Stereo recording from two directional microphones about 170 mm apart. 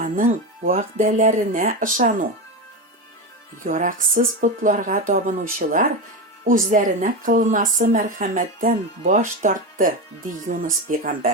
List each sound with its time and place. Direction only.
0.0 s a woman's voice: 55° right (ahead or behind)
3.6 s a woman's voice: 50° right (ahead or behind)